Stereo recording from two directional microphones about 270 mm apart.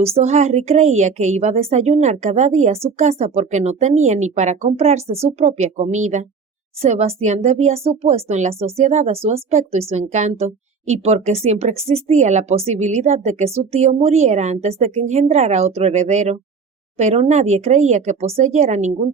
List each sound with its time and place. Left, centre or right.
0.0 s a woman's voice: right